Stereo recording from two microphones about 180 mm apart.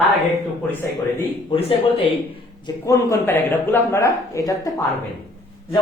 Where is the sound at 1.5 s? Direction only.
30° left (ahead or behind).